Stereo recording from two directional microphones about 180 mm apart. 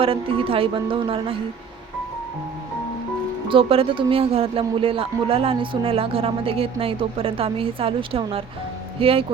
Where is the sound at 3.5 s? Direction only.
30° right (ahead or behind).